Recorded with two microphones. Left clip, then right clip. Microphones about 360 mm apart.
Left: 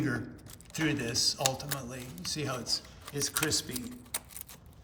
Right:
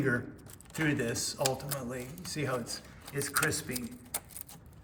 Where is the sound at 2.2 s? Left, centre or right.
Left.